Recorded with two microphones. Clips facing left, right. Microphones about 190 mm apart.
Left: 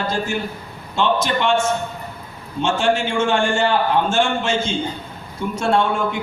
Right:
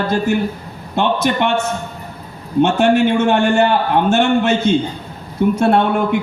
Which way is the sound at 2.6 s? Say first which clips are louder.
Right 5 dB; 60° right (ahead or behind).